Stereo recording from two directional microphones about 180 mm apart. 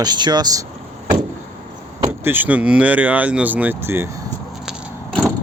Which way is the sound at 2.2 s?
10° right (ahead or behind).